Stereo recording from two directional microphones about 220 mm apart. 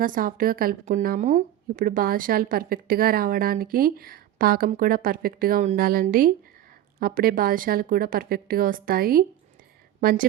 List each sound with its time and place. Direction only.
0.0 s a woman's voice: 40° right (ahead or behind)